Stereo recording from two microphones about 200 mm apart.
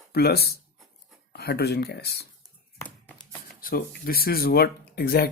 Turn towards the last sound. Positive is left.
turn(degrees=50)  # may be behind; listen again after turning